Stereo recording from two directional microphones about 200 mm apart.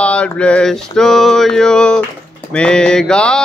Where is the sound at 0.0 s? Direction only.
5° left (ahead or behind).